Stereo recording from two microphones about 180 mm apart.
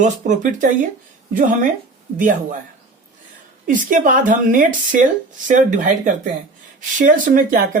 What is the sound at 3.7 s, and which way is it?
Speech, 50° right (ahead or behind).